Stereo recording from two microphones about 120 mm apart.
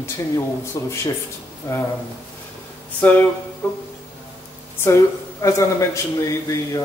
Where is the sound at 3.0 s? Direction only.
15° left (ahead or behind).